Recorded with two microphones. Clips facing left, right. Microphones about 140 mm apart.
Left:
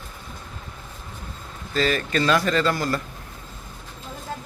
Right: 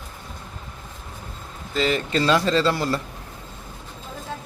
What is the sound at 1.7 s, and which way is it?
Speech, 20° right (ahead or behind).